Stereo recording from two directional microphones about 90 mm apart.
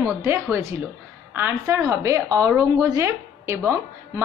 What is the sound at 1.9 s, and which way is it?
A woman's voice, 35° right (ahead or behind).